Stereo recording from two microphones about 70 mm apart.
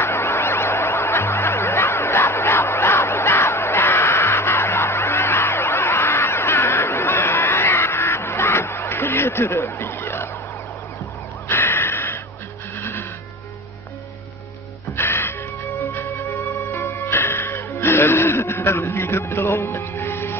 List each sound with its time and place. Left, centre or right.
0.0 s music: left
11.4 s a sound: left
15.0 s music: left
16.7 s music: left